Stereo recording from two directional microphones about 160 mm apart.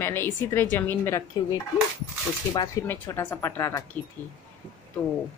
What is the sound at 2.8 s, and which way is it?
Speech, 15° left (ahead or behind).